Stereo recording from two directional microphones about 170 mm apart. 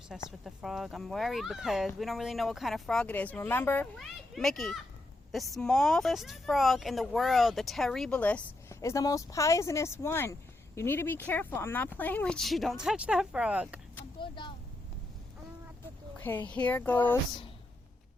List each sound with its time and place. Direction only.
0.3 s speech: centre (ahead or behind)
3.9 s speech: centre (ahead or behind)
8.8 s speech: 20° left (ahead or behind); by 13.7 s 5° right (ahead or behind)
14.2 s vehicle: 30° left (ahead or behind)
16.1 s speech: 10° left (ahead or behind)